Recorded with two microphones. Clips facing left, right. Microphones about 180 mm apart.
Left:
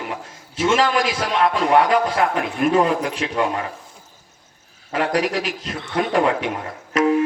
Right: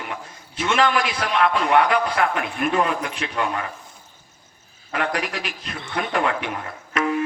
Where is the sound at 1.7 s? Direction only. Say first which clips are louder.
Left 2 dB; 35° left (ahead or behind).